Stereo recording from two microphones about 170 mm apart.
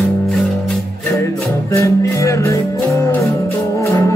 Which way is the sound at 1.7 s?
20° left (ahead or behind).